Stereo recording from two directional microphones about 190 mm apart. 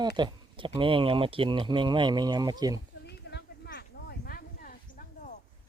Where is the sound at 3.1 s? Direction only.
60° left (ahead or behind).